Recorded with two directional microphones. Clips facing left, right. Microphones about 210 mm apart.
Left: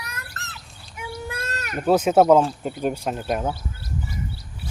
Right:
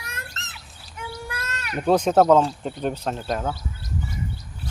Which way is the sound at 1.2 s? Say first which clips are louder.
Left 2 dB; 30° left (ahead or behind).